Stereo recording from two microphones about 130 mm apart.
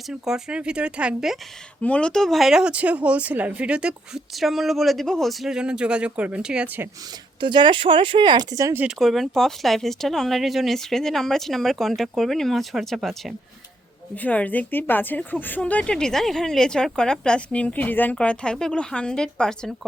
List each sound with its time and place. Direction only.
0.1 s speech: 5° right (ahead or behind)
1.8 s speech: 10° left (ahead or behind); by 6.8 s 5° right (ahead or behind)
7.3 s speech: 35° right (ahead or behind)
9.0 s speech: centre (ahead or behind)
14.2 s a woman's voice: 10° left (ahead or behind)